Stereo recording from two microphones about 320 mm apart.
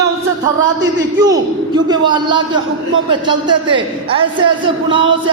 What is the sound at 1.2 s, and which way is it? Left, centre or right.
A man's voice, centre.